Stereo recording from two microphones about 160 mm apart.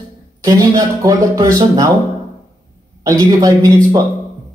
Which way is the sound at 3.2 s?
25° right (ahead or behind).